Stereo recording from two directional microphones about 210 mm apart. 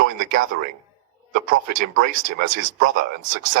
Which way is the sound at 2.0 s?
40° right (ahead or behind).